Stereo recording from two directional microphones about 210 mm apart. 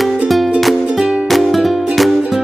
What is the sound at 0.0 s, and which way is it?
Music, centre (ahead or behind).